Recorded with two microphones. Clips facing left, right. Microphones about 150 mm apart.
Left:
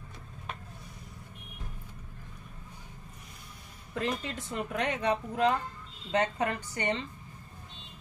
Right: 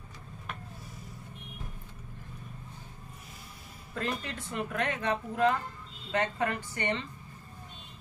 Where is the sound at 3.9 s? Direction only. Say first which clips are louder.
Left 2 dB; 15° left (ahead or behind).